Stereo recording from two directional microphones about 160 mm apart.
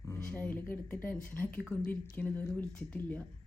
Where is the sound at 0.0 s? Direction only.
20° left (ahead or behind).